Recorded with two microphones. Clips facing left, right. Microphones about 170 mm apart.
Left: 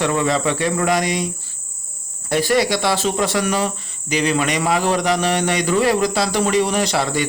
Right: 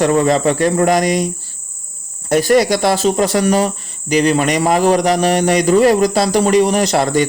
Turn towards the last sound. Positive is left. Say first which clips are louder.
# right 5 dB
turn(degrees=-45)  # may be behind; listen again after turning